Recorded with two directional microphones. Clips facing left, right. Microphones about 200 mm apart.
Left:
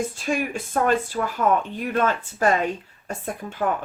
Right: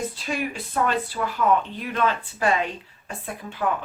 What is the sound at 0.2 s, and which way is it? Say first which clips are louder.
Speech: left 3 dB; 45° left (ahead or behind).